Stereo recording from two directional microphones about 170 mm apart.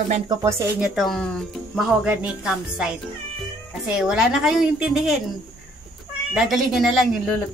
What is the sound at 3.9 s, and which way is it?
Speech, 5° right (ahead or behind).